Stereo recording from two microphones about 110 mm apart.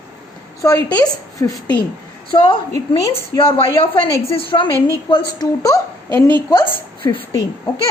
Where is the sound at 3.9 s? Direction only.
55° left (ahead or behind); by 5.8 s 35° left (ahead or behind).